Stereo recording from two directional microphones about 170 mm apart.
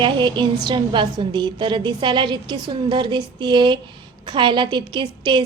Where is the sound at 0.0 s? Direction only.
25° right (ahead or behind).